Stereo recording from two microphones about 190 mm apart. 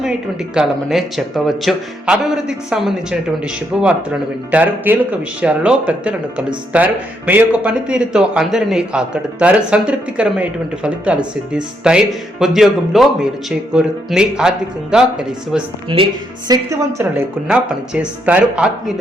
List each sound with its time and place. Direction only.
0.5 s a man's voice: 5° right (ahead or behind)
15.9 s speech: 25° right (ahead or behind)
16.5 s a woman's voice: 15° right (ahead or behind)